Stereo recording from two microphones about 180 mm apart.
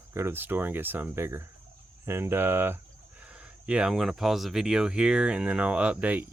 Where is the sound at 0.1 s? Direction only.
15° right (ahead or behind).